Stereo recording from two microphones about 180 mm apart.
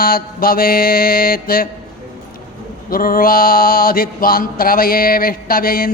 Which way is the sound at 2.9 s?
55° left (ahead or behind).